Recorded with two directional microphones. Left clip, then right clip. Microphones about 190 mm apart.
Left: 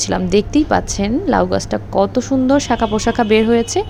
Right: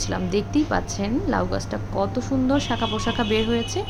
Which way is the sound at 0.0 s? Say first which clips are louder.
Left 9 dB; 35° left (ahead or behind).